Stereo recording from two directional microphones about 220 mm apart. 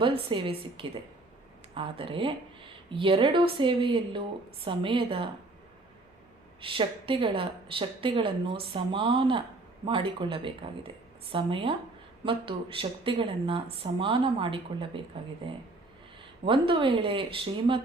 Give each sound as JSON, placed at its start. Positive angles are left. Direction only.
{"t": 0.0, "sound": "speech", "side_deg": -25}
{"t": 6.6, "sound": "speech", "side_deg": -25}